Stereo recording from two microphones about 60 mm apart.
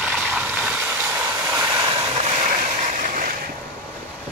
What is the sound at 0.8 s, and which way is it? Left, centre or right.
Vehicle, right.